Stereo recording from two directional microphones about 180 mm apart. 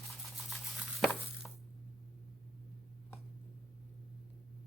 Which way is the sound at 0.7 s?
Centre (ahead or behind).